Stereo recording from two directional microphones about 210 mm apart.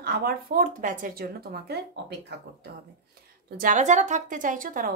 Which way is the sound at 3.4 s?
40° right (ahead or behind).